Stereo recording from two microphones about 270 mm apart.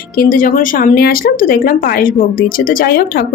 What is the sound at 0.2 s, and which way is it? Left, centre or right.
Speech, left.